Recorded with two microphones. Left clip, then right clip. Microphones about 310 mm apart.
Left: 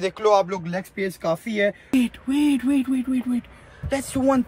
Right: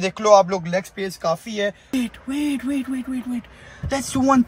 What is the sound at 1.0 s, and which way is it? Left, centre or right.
Speech, right.